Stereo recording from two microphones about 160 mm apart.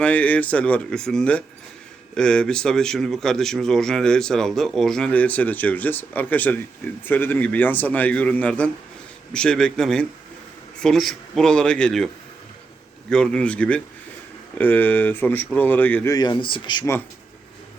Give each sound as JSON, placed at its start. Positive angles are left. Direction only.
{"t": 0.0, "sound": "a man's voice", "side_deg": 10}
{"t": 13.1, "sound": "a man's voice", "side_deg": 5}
{"t": 16.1, "sound": "speech", "side_deg": 30}